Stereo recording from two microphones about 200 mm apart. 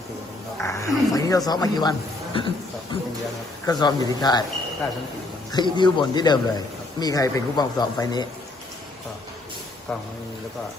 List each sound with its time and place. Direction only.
0.6 s a sound: 15° left (ahead or behind)
3.7 s a man's voice: 20° left (ahead or behind)
5.5 s a man's voice: 20° left (ahead or behind)